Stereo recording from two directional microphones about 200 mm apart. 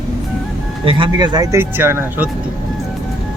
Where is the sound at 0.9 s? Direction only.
25° right (ahead or behind); by 2.3 s 10° right (ahead or behind).